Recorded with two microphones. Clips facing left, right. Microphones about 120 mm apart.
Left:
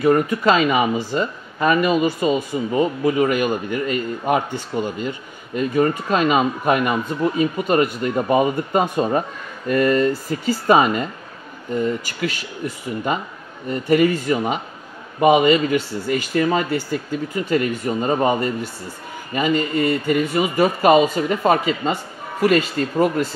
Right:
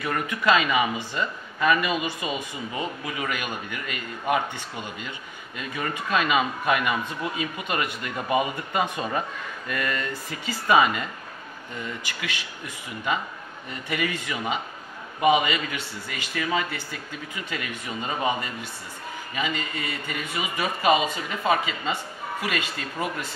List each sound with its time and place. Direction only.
0.0 s speech: 30° left (ahead or behind)